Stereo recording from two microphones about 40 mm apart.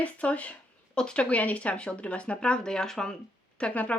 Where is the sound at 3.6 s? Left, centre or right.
Left.